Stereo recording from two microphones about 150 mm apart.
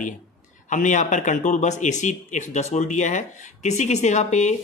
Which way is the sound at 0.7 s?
55° left (ahead or behind).